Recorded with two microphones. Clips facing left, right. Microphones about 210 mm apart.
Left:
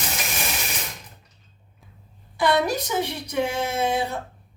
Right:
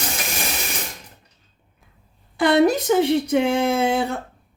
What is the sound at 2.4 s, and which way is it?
Speech, 55° right (ahead or behind).